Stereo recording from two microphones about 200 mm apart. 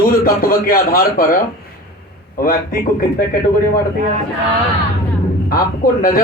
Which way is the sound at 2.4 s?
45° left (ahead or behind).